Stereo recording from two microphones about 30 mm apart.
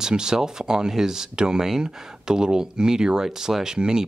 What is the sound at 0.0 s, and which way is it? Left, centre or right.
Speech, right.